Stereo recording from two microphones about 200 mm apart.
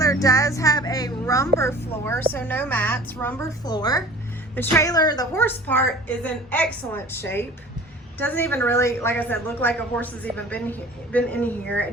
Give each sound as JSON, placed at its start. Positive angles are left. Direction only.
{"t": 0.0, "sound": "a child's voice", "side_deg": 15}